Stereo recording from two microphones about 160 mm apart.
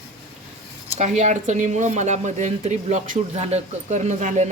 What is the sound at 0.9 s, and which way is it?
Speech, 45° right (ahead or behind).